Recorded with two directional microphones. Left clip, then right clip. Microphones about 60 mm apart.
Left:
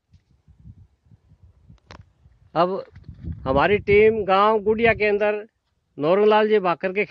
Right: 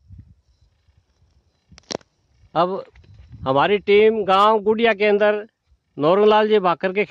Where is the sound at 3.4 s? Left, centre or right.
Right.